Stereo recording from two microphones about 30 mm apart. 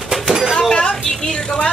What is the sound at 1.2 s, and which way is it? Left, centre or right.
Speech, left.